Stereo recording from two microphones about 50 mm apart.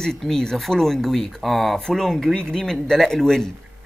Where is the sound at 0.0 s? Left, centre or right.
Centre.